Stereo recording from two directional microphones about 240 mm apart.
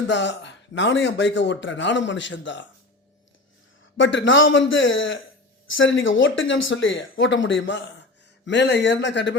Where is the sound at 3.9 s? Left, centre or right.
Left.